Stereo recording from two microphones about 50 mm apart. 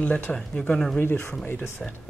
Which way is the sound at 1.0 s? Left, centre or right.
Left.